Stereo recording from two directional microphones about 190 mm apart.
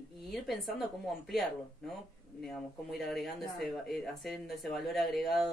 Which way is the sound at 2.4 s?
Centre (ahead or behind).